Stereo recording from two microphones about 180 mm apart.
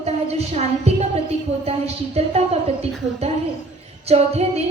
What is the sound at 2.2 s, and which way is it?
Speech, 35° right (ahead or behind).